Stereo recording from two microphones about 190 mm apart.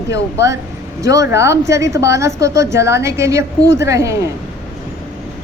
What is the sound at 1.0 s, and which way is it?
A woman's voice, 15° right (ahead or behind).